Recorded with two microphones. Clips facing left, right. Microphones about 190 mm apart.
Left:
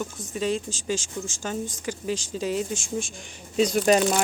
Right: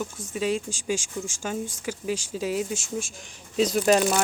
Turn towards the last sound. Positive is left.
turn(degrees=0)  # may be behind; listen again after turning